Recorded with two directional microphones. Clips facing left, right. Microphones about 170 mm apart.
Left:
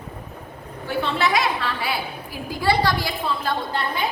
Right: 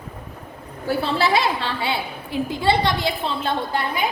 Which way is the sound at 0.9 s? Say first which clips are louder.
Right 2 dB; 35° right (ahead or behind).